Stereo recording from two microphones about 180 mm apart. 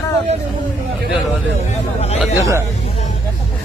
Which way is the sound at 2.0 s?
35° left (ahead or behind).